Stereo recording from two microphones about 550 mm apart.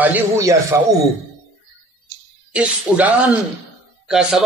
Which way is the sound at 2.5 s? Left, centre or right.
Centre.